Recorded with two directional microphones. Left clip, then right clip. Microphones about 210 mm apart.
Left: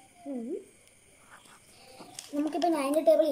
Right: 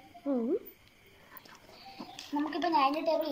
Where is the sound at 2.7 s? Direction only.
40° left (ahead or behind).